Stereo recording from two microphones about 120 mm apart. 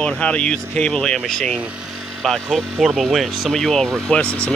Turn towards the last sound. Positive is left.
turn(degrees=10)  # may be behind; listen again after turning